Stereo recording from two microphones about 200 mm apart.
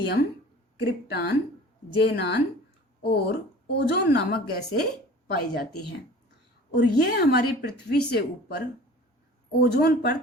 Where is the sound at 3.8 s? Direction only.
55° left (ahead or behind).